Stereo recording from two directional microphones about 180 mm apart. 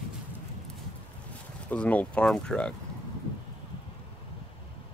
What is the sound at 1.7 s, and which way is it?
Speech, 10° left (ahead or behind).